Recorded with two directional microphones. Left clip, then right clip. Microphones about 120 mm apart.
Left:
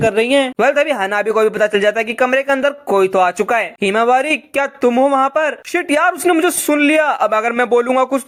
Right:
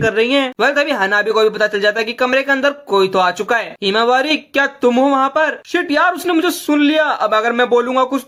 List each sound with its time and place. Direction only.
0.0 s speech: 35° left (ahead or behind); by 4.9 s 50° left (ahead or behind)
4.9 s speech: 25° left (ahead or behind)
5.1 s speech: 50° left (ahead or behind)